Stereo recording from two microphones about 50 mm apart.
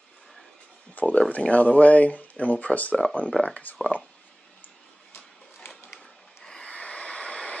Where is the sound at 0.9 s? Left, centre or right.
Left.